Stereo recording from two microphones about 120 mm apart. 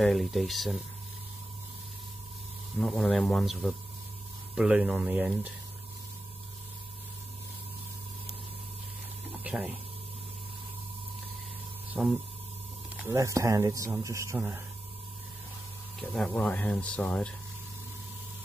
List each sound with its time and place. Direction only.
0.0 s speech: centre (ahead or behind)
2.8 s a man's voice: 5° left (ahead or behind)
9.4 s speech: 10° right (ahead or behind)
11.9 s speech: centre (ahead or behind)
13.1 s speech: 25° right (ahead or behind)
16.0 s speech: 5° left (ahead or behind)